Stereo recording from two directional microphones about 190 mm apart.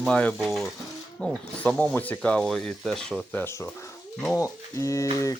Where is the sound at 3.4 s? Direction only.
15° left (ahead or behind).